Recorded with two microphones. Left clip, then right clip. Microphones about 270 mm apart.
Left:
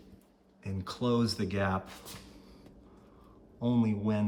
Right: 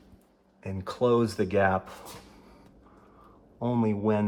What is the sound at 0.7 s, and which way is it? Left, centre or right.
Speech, centre.